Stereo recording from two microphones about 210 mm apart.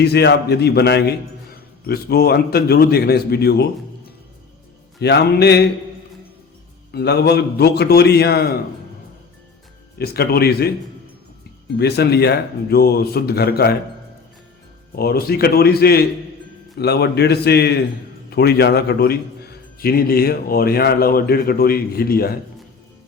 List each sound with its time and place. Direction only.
0.0 s speech: 50° left (ahead or behind)
4.9 s speech: 55° left (ahead or behind)
6.9 s speech: 50° left (ahead or behind)
10.0 s speech: 50° left (ahead or behind)
11.8 s speech: 50° left (ahead or behind)
14.9 s speech: 45° left (ahead or behind)